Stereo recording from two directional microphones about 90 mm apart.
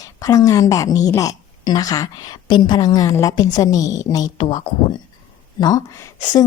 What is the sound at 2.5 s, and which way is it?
A woman's voice, 60° left (ahead or behind).